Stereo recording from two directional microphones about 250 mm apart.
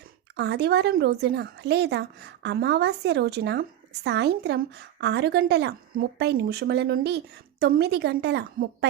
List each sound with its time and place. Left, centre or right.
0.3 s speech: right